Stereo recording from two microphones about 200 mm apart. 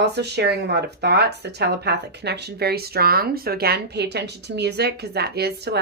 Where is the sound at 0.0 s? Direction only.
55° right (ahead or behind).